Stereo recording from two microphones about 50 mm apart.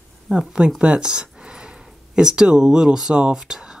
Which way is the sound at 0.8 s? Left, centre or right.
Centre.